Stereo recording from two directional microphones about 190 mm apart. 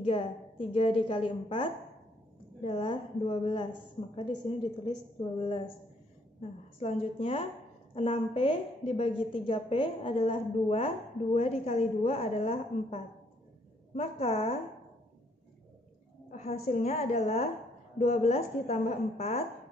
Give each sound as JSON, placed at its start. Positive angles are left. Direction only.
{"t": 0.0, "sound": "a woman's voice", "side_deg": 30}
{"t": 6.8, "sound": "a woman's voice", "side_deg": 30}
{"t": 16.3, "sound": "a woman's voice", "side_deg": 35}